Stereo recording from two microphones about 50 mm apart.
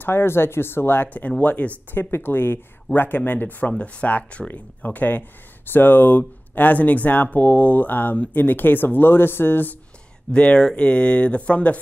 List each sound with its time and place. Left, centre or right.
0.0 s speech: left
1.0 s speech: left
2.0 s speech: left
10.3 s speech: left